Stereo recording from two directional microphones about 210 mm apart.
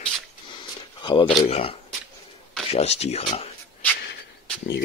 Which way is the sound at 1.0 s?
25° left (ahead or behind).